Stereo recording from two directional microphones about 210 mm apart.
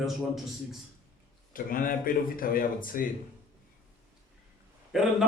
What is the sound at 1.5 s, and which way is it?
Speech, 40° left (ahead or behind).